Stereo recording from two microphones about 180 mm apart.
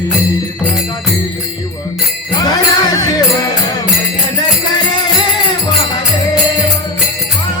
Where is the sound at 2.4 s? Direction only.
20° left (ahead or behind).